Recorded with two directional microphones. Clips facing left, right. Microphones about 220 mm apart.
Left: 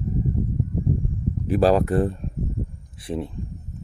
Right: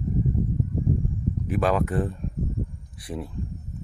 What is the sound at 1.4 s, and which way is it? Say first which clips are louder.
Speech: left 6 dB; 35° left (ahead or behind).